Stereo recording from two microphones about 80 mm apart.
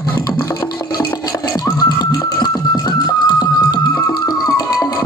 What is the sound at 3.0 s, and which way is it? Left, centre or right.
Music, left.